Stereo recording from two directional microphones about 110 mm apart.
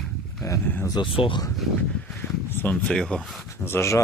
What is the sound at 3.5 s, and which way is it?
Speech, 20° left (ahead or behind).